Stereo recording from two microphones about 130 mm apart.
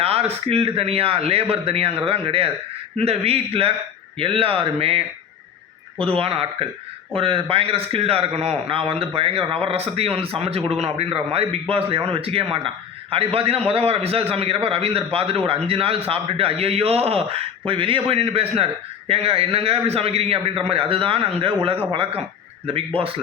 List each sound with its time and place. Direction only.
0.0 s a man's voice: 50° right (ahead or behind)
23.0 s a man's voice: 45° right (ahead or behind)